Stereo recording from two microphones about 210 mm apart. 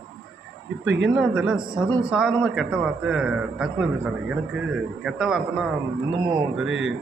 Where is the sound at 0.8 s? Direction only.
60° right (ahead or behind).